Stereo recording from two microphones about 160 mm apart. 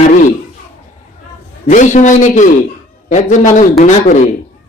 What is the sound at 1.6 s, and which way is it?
A man's voice, 50° left (ahead or behind).